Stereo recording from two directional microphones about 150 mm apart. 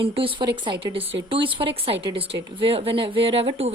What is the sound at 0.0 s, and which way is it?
Speech, 35° right (ahead or behind).